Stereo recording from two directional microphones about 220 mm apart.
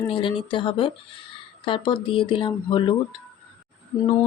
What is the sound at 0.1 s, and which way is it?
Speech, 25° left (ahead or behind).